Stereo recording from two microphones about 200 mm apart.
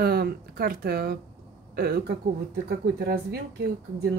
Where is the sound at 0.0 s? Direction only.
50° right (ahead or behind).